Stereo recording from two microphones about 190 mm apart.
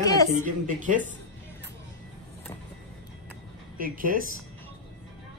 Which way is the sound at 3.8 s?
45° right (ahead or behind).